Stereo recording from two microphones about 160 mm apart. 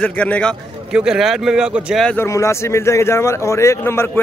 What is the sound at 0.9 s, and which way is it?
Speech, 5° right (ahead or behind).